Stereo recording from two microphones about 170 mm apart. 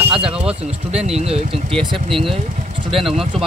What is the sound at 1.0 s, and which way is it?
Speech, 40° right (ahead or behind).